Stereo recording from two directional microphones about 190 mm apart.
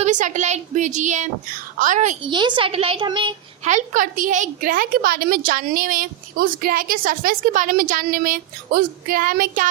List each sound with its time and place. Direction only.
0.0 s a woman's voice: 40° right (ahead or behind)
2.2 s a child's voice: 25° right (ahead or behind)
3.7 s a woman's voice: 40° right (ahead or behind)